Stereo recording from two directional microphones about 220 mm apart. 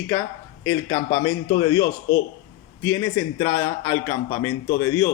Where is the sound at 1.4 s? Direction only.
20° left (ahead or behind).